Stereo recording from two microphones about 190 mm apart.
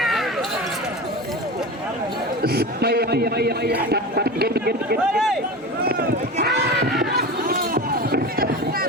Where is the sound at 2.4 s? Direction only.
55° right (ahead or behind).